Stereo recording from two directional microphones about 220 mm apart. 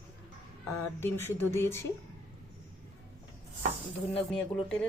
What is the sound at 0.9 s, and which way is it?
Speech, 10° left (ahead or behind).